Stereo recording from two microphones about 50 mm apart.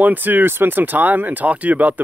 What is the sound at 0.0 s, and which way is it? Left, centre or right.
Speech, right.